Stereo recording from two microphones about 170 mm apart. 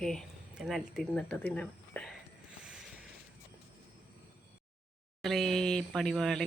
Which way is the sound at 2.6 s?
5° right (ahead or behind).